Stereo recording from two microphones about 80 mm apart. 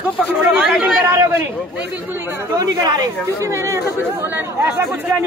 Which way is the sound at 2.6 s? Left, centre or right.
Right.